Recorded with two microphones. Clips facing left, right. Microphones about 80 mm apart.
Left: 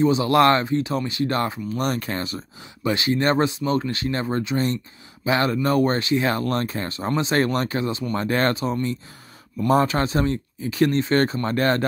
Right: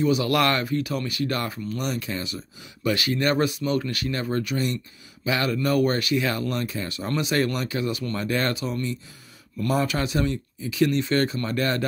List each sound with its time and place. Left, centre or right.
0.0 s speech: left
1.8 s speech: left
2.8 s speech: left
6.4 s speech: left